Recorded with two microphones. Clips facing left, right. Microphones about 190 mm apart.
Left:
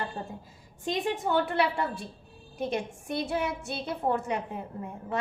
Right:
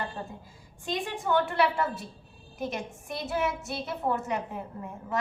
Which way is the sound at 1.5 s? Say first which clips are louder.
Right 1 dB; 30° left (ahead or behind).